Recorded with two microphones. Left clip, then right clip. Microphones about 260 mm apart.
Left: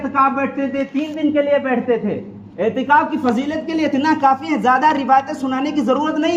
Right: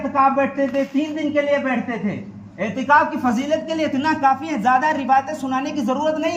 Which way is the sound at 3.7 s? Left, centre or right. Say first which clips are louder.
Left 3 dB; centre.